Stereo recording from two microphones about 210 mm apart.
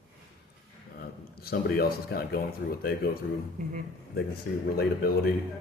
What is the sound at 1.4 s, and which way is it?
Speech, 45° left (ahead or behind).